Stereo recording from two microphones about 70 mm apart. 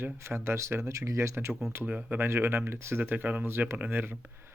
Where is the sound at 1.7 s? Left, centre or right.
Right.